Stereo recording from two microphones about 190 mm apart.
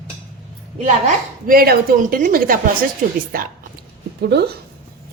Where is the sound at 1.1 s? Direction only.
50° right (ahead or behind).